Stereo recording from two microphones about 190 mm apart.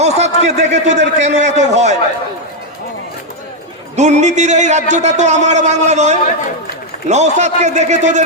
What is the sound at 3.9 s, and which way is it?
A man's voice, 35° right (ahead or behind).